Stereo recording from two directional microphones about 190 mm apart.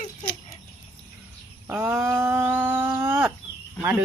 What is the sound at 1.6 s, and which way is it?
Livestock, 10° right (ahead or behind).